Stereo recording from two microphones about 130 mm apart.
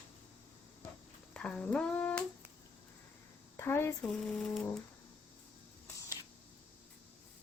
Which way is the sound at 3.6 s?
20° left (ahead or behind).